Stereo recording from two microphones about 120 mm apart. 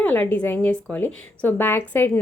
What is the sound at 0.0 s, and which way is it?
A woman's voice, 15° left (ahead or behind).